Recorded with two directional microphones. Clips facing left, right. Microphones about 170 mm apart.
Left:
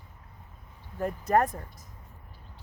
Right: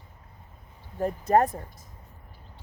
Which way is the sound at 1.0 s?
30° right (ahead or behind).